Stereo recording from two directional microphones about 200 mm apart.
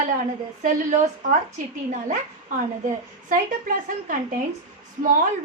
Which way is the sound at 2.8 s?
45° right (ahead or behind).